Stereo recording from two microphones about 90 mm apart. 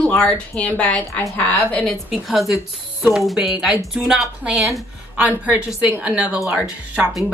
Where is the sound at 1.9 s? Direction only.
Centre (ahead or behind).